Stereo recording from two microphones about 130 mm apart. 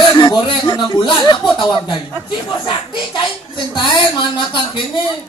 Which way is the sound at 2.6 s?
40° left (ahead or behind).